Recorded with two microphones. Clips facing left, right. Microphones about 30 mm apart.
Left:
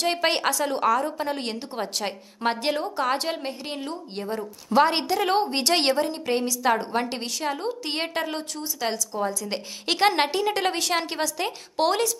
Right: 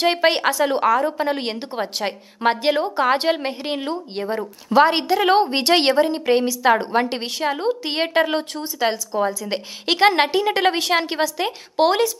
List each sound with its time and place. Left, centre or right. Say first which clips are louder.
0.2 s a woman's voice: right 6 dB; centre
4.7 s a woman's voice: right 5 dB; centre